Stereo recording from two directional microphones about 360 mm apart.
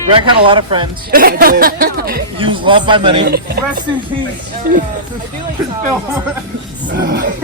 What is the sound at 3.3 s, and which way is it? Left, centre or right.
Speech, right.